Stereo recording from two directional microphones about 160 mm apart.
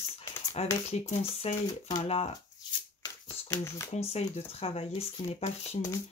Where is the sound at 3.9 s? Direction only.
40° left (ahead or behind).